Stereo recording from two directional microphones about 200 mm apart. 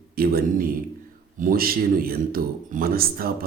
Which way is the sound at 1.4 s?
45° right (ahead or behind).